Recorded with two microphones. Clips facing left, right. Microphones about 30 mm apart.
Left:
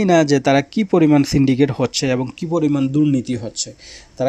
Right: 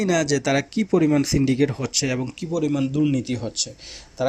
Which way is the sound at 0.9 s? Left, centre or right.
Left.